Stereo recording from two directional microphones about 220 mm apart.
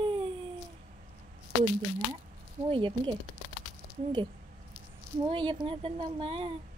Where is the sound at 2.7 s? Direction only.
20° right (ahead or behind).